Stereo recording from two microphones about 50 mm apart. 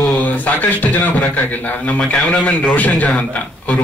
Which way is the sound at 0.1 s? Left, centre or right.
Left.